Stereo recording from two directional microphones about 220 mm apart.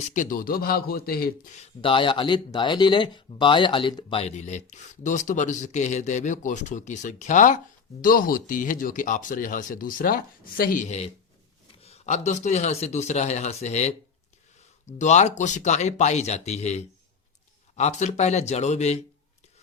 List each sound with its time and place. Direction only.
0.1 s a man's voice: 35° left (ahead or behind)